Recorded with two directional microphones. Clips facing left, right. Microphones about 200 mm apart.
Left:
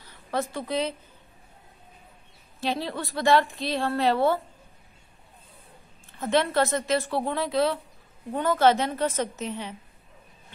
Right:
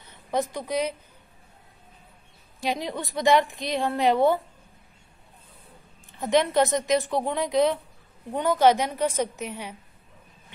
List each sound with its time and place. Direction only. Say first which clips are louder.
0.0 s a woman's voice: right 2 dB; 20° right (ahead or behind)
2.6 s a woman's voice: even; 15° right (ahead or behind)
6.1 s a woman's voice: right 2 dB; 15° right (ahead or behind)